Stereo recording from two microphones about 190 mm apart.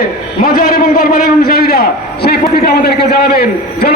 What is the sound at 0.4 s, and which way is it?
A man's voice, 50° left (ahead or behind).